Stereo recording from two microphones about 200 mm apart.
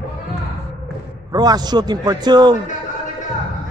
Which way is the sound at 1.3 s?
20° right (ahead or behind).